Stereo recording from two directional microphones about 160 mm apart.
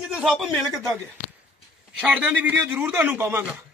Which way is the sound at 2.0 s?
10° right (ahead or behind).